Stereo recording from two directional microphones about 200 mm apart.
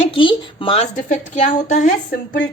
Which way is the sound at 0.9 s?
40° left (ahead or behind).